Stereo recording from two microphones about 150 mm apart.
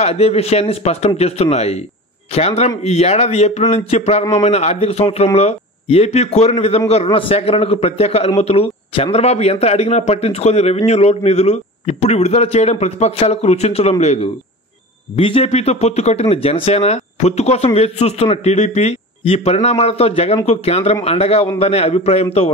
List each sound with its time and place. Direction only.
0.0 s a man's voice: 45° left (ahead or behind)